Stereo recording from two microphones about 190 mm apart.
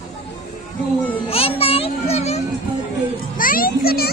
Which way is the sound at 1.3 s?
30° left (ahead or behind).